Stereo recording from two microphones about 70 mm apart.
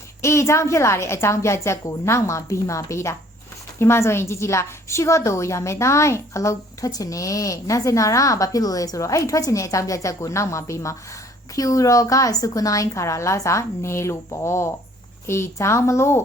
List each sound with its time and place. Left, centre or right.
0.2 s a woman's voice: left
11.5 s a woman's voice: left